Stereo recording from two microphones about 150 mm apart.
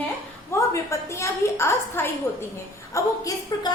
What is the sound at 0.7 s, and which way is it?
A woman's voice, 20° left (ahead or behind).